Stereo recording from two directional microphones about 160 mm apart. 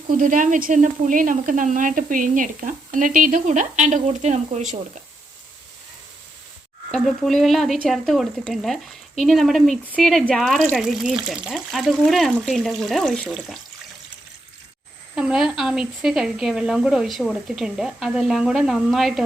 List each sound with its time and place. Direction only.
0.1 s speech: 55° right (ahead or behind)
6.9 s speech: centre (ahead or behind)
15.1 s speech: 5° right (ahead or behind)